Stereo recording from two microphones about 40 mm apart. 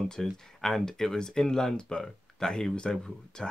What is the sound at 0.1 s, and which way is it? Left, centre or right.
Speech, centre.